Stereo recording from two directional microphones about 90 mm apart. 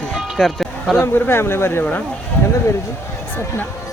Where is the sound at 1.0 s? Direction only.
25° left (ahead or behind).